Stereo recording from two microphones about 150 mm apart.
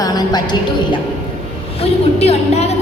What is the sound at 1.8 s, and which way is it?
Speech, 45° left (ahead or behind).